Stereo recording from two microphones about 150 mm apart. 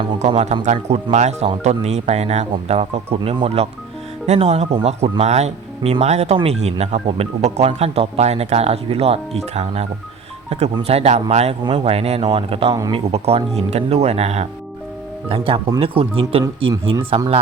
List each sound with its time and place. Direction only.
0.2 s speech: 45° right (ahead or behind)
10.8 s speech: 45° right (ahead or behind)